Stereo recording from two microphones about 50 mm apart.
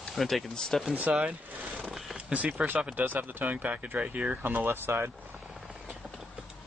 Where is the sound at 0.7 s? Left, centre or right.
Centre.